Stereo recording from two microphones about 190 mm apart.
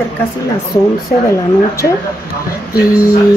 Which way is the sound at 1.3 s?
15° left (ahead or behind).